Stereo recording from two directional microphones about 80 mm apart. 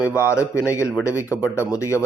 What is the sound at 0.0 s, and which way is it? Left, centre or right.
A man's voice, left.